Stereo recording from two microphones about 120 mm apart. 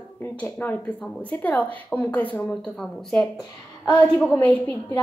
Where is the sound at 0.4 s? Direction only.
15° left (ahead or behind).